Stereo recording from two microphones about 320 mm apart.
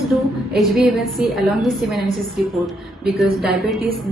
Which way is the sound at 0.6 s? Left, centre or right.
Centre.